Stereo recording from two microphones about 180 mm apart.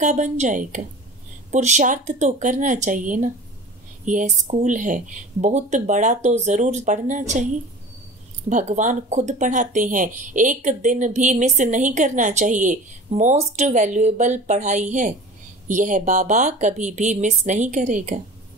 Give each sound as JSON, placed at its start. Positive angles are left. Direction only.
{"t": 0.0, "sound": "speech", "side_deg": -40}
{"t": 8.5, "sound": "speech", "side_deg": -40}